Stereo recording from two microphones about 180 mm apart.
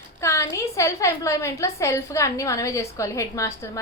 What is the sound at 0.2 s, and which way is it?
A woman's voice, 15° left (ahead or behind).